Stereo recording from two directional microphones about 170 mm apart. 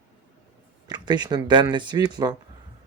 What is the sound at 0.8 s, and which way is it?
Speech, 25° right (ahead or behind).